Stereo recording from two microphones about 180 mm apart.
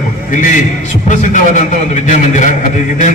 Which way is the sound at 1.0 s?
40° left (ahead or behind).